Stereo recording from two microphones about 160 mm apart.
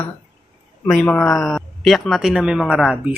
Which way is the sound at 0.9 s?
5° left (ahead or behind).